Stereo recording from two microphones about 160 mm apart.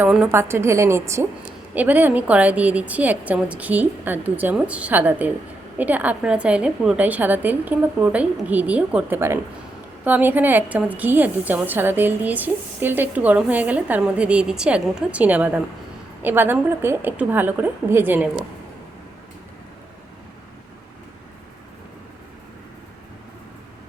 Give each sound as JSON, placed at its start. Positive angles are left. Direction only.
{"t": 0.0, "sound": "a woman's voice", "side_deg": -10}